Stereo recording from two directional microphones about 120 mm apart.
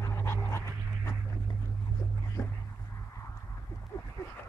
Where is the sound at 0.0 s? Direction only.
20° left (ahead or behind).